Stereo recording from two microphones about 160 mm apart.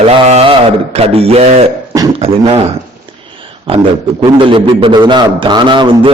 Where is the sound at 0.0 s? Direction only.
40° right (ahead or behind).